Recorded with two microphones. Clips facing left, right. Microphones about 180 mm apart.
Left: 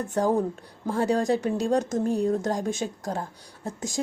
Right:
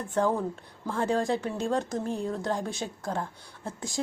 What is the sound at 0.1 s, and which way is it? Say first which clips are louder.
A woman's voice: left 2 dB; 40° left (ahead or behind).